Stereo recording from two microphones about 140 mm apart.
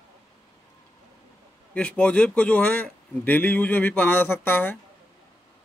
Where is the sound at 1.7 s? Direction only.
10° left (ahead or behind).